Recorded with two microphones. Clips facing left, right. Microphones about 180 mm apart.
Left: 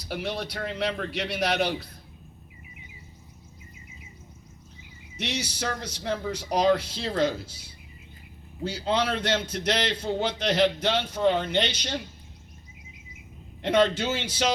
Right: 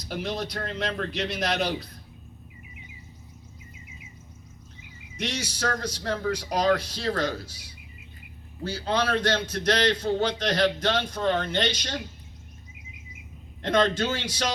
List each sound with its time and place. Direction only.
0.1 s a man's voice: 10° left (ahead or behind)
5.2 s a man's voice: 15° left (ahead or behind)
13.6 s a man's voice: 15° left (ahead or behind)